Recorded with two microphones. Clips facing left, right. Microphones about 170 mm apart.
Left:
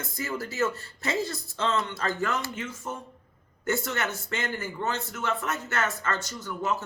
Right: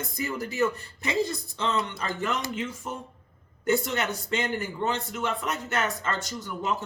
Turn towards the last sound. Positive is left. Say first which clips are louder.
# even
turn(degrees=-20)  # may be behind; listen again after turning